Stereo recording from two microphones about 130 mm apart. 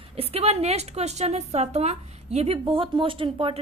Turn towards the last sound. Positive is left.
turn(degrees=-45)  # may be behind; listen again after turning